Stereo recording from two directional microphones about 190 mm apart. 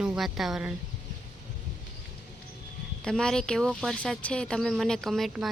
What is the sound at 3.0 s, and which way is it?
Speech, 5° left (ahead or behind).